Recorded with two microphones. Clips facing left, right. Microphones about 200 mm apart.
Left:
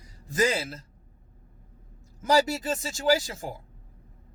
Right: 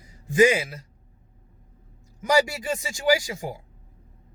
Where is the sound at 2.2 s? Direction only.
10° right (ahead or behind).